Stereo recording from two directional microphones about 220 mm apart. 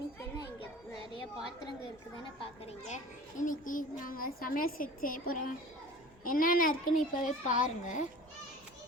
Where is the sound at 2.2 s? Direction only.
25° left (ahead or behind).